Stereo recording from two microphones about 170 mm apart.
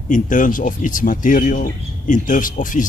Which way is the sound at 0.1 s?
50° left (ahead or behind).